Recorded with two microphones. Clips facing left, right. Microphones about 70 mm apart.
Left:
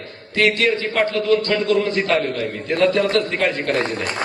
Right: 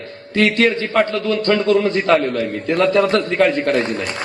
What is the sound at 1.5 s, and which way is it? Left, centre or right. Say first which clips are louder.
A man's voice: right 3 dB; right.